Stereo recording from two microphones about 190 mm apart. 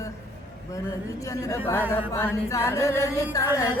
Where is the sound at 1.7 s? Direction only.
15° left (ahead or behind).